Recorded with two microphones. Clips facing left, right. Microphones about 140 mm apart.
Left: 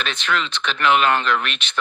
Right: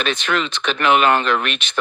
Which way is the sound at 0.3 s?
50° right (ahead or behind).